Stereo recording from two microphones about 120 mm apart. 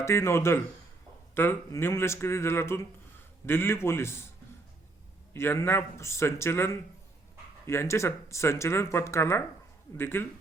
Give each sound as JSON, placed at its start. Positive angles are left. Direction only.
{"t": 0.0, "sound": "speech", "side_deg": 25}
{"t": 5.3, "sound": "speech", "side_deg": 20}